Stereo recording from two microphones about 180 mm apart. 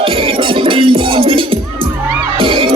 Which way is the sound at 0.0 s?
30° right (ahead or behind).